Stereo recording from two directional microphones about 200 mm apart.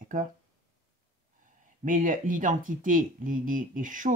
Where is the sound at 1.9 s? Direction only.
40° right (ahead or behind).